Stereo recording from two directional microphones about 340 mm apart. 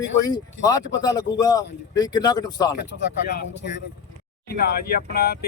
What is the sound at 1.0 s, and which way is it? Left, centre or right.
A man's voice, centre.